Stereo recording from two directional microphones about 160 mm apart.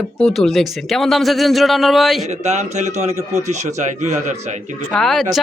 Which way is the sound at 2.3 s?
45° right (ahead or behind).